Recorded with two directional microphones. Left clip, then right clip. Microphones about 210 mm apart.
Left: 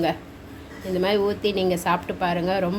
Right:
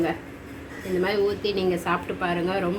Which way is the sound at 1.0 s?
55° left (ahead or behind).